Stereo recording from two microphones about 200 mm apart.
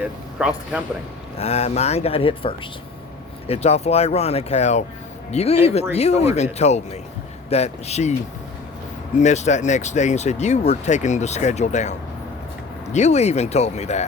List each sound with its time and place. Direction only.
0.0 s speech: 5° right (ahead or behind)
1.4 s speech: 35° left (ahead or behind)
9.1 s speech: 35° left (ahead or behind)